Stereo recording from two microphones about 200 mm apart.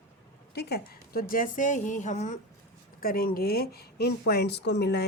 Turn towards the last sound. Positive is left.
turn(degrees=55)  # may be behind; listen again after turning